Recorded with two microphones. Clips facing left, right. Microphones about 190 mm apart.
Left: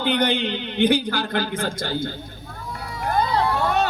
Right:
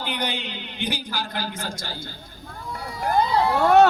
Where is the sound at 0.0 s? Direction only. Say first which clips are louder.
Left 8 dB; 60° left (ahead or behind).